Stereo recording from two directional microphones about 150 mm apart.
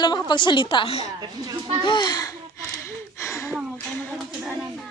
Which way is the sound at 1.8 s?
30° left (ahead or behind).